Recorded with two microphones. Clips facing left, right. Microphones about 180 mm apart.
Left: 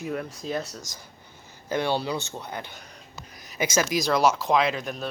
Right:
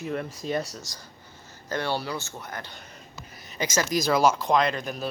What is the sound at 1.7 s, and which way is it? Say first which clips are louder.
Speech: left 3 dB; 15° left (ahead or behind).